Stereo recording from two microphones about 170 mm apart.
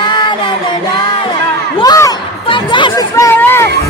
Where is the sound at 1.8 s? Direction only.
20° left (ahead or behind).